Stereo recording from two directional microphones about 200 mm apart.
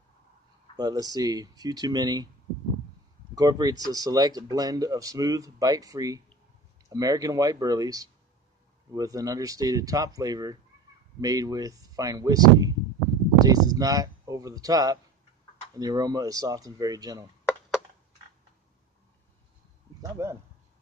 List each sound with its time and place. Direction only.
0.7 s speech: 20° right (ahead or behind)
3.3 s speech: 20° right (ahead or behind)
20.0 s speech: 15° right (ahead or behind)